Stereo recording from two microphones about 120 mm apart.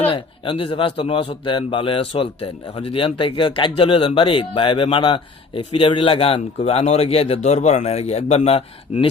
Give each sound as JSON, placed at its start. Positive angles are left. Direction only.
{"t": 0.1, "sound": "a man's voice", "side_deg": 45}